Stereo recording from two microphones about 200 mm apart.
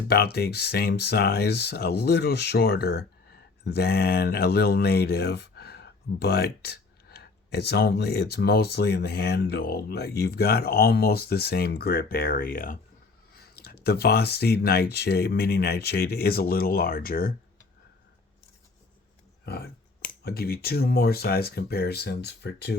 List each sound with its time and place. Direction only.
0.1 s speech: 50° left (ahead or behind)
19.5 s speech: 55° left (ahead or behind)